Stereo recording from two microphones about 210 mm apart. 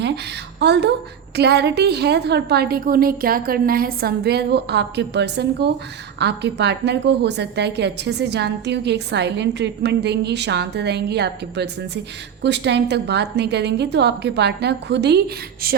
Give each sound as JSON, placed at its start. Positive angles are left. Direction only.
{"t": 0.6, "sound": "a woman's voice", "side_deg": -55}